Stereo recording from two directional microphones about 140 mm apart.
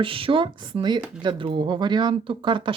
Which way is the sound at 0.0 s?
40° right (ahead or behind).